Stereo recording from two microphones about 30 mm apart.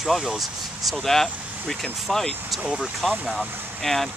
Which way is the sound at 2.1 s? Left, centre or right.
Centre.